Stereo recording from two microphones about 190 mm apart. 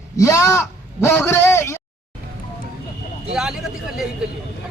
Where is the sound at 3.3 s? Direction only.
5° right (ahead or behind).